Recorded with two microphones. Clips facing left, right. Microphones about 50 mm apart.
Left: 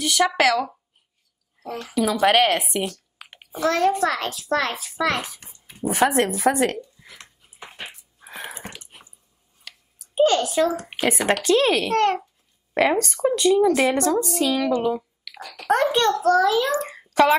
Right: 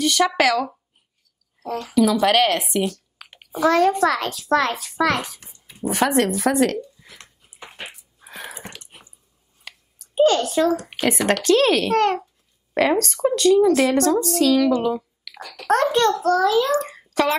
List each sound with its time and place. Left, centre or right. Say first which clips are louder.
0.0 s a child's voice: right 1 dB; centre
1.8 s a child's voice: right 3 dB; centre
5.4 s a sound: left 1 dB; centre
5.9 s speech: even; centre
7.0 s a sound: left 1 dB; centre
10.1 s a child's voice: right 1 dB; centre
11.9 s a child's voice: right 1 dB; centre
12.7 s speech: right 1 dB; centre
14.8 s a sound: right 1 dB; centre
15.5 s a child's voice: right 1 dB; centre
16.2 s a child's voice: even; left